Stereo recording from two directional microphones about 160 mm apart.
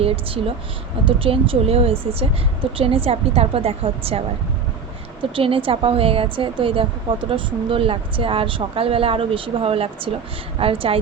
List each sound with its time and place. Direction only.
0.0 s a woman's voice: 35° right (ahead or behind)
5.3 s a woman's voice: 35° right (ahead or behind)